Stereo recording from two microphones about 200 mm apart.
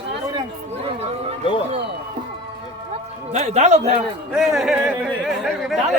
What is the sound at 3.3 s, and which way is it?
Speech, 35° right (ahead or behind).